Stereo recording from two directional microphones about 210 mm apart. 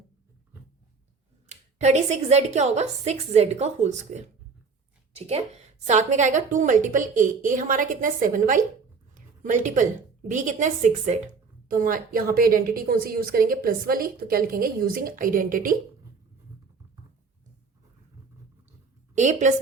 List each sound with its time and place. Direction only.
1.5 s a woman's voice: 35° right (ahead or behind)
19.1 s a woman's voice: 35° right (ahead or behind)